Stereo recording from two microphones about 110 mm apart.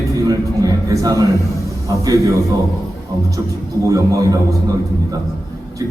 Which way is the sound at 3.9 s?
35° right (ahead or behind).